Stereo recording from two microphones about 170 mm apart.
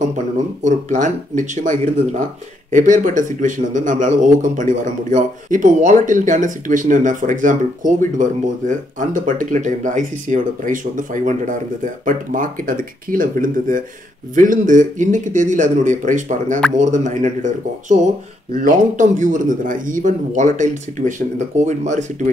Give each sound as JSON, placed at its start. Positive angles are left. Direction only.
{"t": 0.7, "sound": "a man's voice", "side_deg": -45}